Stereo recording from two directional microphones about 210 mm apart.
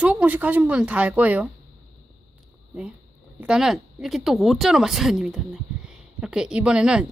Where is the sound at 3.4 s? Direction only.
5° right (ahead or behind).